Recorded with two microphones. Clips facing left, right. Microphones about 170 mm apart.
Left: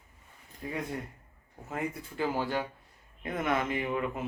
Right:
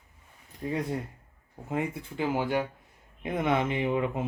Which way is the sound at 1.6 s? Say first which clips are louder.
Right 4 dB; 20° right (ahead or behind).